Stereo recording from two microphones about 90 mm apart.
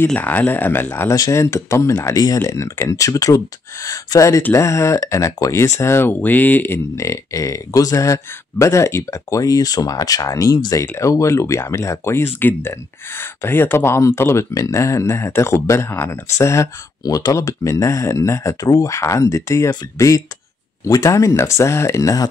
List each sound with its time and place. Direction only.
0.1 s speech: 20° left (ahead or behind)
1.1 s speech: 35° left (ahead or behind)
2.0 s speech: 45° left (ahead or behind)